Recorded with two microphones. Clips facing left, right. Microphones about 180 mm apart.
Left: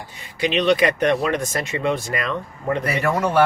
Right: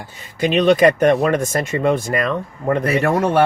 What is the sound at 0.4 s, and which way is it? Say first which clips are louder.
Speech: right 5 dB; 50° right (ahead or behind).